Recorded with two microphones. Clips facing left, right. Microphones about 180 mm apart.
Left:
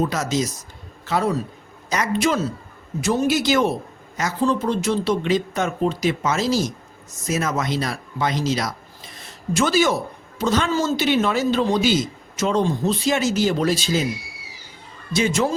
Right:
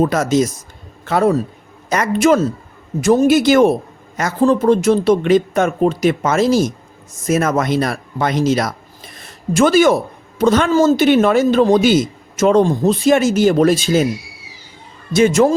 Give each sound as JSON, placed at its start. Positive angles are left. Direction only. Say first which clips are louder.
{"t": 0.0, "sound": "speech", "louder": "right 7 dB", "side_deg": -50}
{"t": 15.1, "sound": "speech", "louder": "right 8 dB", "side_deg": -50}